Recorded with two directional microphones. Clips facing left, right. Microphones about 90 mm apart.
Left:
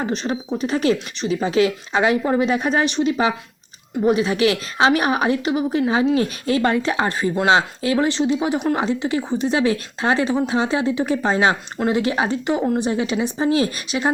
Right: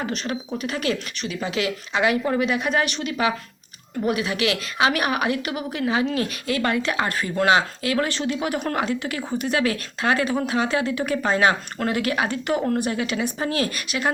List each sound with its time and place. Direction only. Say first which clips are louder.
0.0 s a woman's voice: left 4 dB; 25° left (ahead or behind)